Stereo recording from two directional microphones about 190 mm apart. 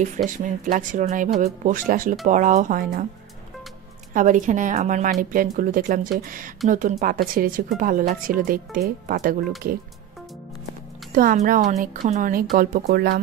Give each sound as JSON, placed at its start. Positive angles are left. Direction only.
{"t": 0.0, "sound": "speech", "side_deg": -40}
{"t": 4.1, "sound": "speech", "side_deg": -45}
{"t": 11.1, "sound": "speech", "side_deg": -45}